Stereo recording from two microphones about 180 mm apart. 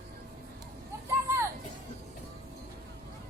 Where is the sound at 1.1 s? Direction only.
15° right (ahead or behind).